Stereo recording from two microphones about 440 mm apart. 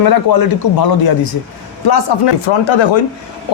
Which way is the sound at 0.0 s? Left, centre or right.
Left.